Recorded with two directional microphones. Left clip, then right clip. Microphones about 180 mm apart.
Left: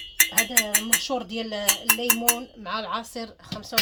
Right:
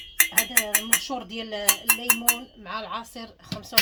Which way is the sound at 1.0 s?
35° left (ahead or behind).